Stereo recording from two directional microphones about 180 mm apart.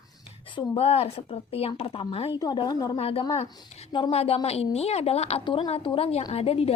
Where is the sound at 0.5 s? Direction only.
35° left (ahead or behind).